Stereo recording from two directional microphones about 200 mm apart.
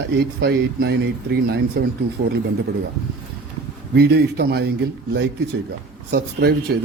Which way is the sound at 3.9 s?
55° right (ahead or behind).